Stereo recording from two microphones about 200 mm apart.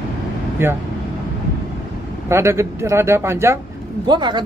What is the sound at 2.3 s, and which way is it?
A woman's voice, 15° right (ahead or behind).